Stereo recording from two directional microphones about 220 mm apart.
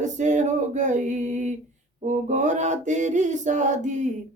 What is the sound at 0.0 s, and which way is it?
A capella, 35° right (ahead or behind).